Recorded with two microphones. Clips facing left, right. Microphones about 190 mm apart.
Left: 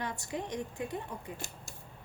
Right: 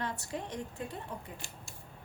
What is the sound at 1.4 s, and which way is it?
Speech, 45° left (ahead or behind).